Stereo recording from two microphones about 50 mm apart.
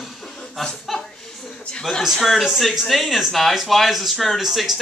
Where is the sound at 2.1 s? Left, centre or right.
Centre.